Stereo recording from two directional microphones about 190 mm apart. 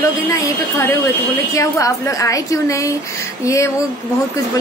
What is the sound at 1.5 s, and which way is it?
A woman's voice, 15° left (ahead or behind).